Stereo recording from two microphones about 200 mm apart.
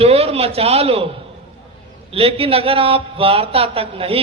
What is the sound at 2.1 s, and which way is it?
Speech, 30° right (ahead or behind).